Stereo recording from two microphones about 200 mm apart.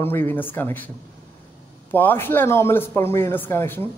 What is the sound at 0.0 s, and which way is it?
Speech, 10° left (ahead or behind).